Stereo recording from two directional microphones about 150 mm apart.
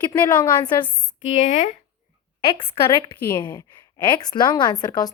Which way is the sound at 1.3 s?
50° left (ahead or behind).